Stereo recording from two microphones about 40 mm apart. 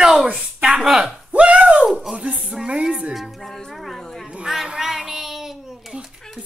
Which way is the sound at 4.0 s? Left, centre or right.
Centre.